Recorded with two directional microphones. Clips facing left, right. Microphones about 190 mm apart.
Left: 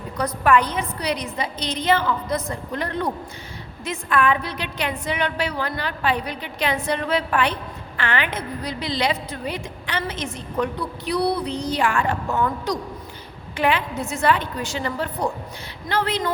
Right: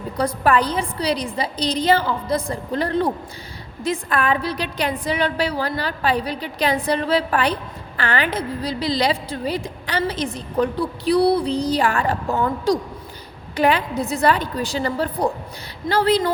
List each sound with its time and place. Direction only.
0.2 s a woman's voice: 35° right (ahead or behind)